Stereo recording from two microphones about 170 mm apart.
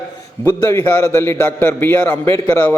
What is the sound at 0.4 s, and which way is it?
A man's voice, 10° left (ahead or behind).